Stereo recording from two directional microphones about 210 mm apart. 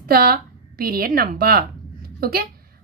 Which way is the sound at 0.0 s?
45° right (ahead or behind).